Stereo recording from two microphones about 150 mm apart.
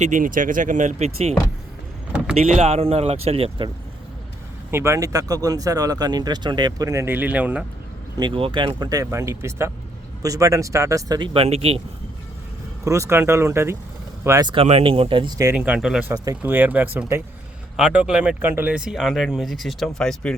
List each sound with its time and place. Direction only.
0.0 s speech: 60° right (ahead or behind); by 3.7 s 40° right (ahead or behind)
4.7 s speech: 20° right (ahead or behind)
8.2 s speech: 35° right (ahead or behind)
11.3 s speech: 40° right (ahead or behind)
12.8 s speech: 20° right (ahead or behind)
14.5 s speech: 40° right (ahead or behind); by 15.5 s 25° right (ahead or behind)
15.5 s speech: 10° right (ahead or behind)